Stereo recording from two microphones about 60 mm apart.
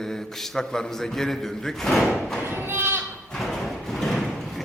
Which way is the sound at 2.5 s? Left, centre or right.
Right.